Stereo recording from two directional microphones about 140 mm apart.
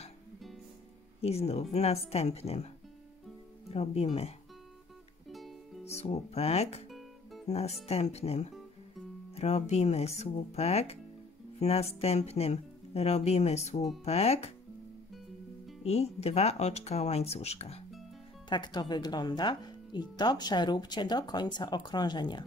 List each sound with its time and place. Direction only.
1.2 s speech: 50° left (ahead or behind)
3.7 s speech: 45° left (ahead or behind)
5.3 s music: centre (ahead or behind)
5.9 s speech: 50° left (ahead or behind)
6.9 s music: centre (ahead or behind)
7.4 s speech: 50° left (ahead or behind)
15.8 s speech: 50° left (ahead or behind)
18.5 s speech: 30° left (ahead or behind)